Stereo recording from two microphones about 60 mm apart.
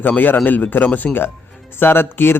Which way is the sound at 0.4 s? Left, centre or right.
Left.